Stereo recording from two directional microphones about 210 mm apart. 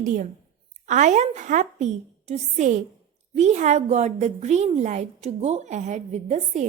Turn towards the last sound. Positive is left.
turn(degrees=-35)  # may be behind; listen again after turning